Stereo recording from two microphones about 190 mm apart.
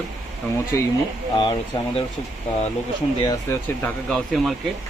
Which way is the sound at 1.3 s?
25° left (ahead or behind).